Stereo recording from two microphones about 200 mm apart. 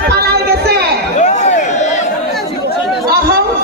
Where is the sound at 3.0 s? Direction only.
50° right (ahead or behind).